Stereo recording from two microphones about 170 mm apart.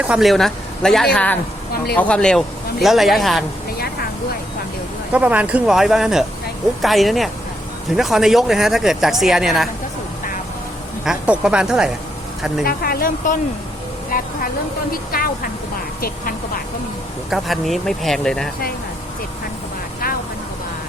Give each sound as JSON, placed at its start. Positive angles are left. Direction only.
{"t": 0.0, "sound": "speech", "side_deg": -5}
{"t": 5.1, "sound": "speech", "side_deg": -10}
{"t": 11.0, "sound": "speech", "side_deg": -5}
{"t": 12.6, "sound": "speech", "side_deg": 60}
{"t": 14.9, "sound": "speech", "side_deg": 60}
{"t": 17.2, "sound": "speech", "side_deg": 0}